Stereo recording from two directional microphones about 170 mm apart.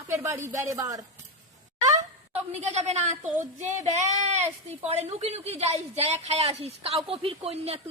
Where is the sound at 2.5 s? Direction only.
40° right (ahead or behind).